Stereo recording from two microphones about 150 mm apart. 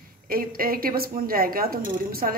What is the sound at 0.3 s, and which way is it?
Speech, 75° right (ahead or behind).